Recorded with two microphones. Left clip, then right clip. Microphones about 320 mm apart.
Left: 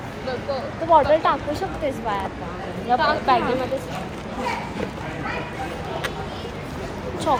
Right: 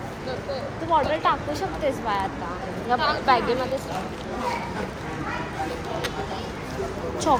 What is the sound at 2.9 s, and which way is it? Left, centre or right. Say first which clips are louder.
Speech: left 2 dB; centre.